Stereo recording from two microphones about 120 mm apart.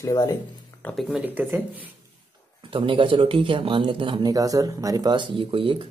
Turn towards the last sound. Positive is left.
turn(degrees=-45)  # may be behind; listen again after turning